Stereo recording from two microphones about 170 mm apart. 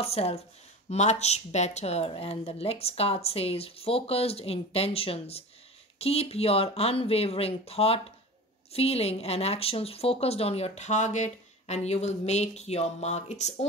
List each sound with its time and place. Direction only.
0.0 s a woman's voice: 35° left (ahead or behind)